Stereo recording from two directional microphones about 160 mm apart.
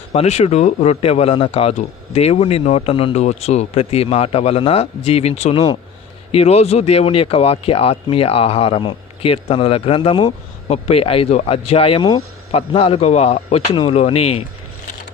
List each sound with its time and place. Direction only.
0.1 s speech: 40° left (ahead or behind)